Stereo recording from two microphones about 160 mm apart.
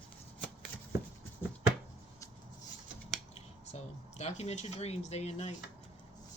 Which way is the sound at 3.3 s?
40° left (ahead or behind).